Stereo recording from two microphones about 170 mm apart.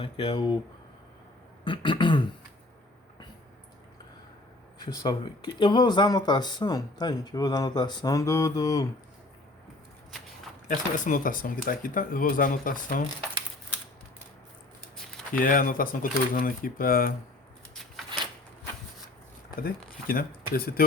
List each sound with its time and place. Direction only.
0.0 s speech: 30° left (ahead or behind)
1.6 s speech: 30° left (ahead or behind)
4.8 s speech: 25° left (ahead or behind)
10.7 s speech: 50° left (ahead or behind)
15.3 s speech: 55° left (ahead or behind)
19.5 s speech: 60° left (ahead or behind)